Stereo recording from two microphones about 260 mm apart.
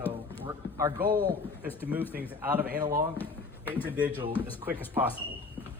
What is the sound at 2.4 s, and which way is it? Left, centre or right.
Speech, centre.